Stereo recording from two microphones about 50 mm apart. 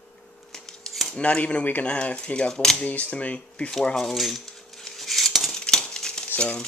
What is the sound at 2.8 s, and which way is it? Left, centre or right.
Speech, left.